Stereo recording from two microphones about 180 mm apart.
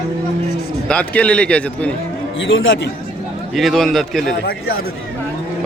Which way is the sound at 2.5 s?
90° left.